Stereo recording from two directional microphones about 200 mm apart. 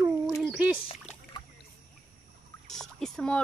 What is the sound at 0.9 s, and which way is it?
Splash, 25° left (ahead or behind).